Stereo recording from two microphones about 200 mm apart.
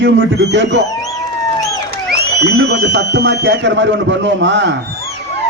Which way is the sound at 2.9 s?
55° right (ahead or behind).